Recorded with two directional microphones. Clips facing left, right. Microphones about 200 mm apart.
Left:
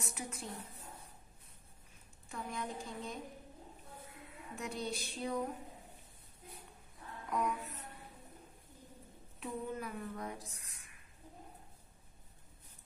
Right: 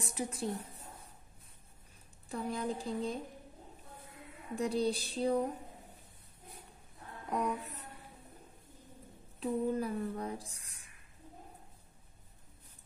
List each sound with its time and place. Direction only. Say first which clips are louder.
0.0 s female singing: right 7 dB; 30° right (ahead or behind)
2.2 s female singing: right 6 dB; 35° right (ahead or behind)
4.6 s female singing: right 9 dB; 35° right (ahead or behind)
7.2 s music: right 2 dB; 35° right (ahead or behind)
9.4 s female singing: right 8 dB; 35° right (ahead or behind)